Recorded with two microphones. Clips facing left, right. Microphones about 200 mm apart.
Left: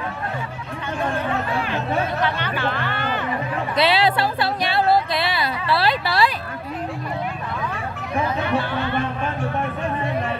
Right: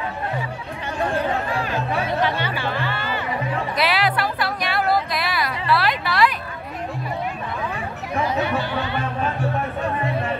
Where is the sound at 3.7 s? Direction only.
25° left (ahead or behind).